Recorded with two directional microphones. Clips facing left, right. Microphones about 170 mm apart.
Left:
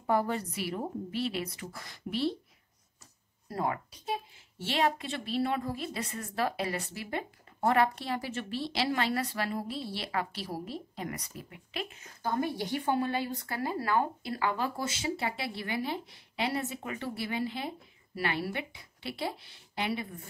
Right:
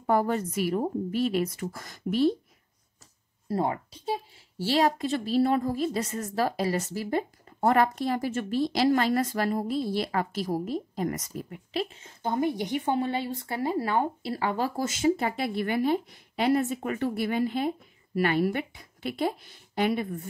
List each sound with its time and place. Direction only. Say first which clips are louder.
0.0 s a woman's voice: right 4 dB; 45° right (ahead or behind)
3.4 s a woman's voice: right 5 dB; 30° right (ahead or behind); by 20.1 s 50° right (ahead or behind)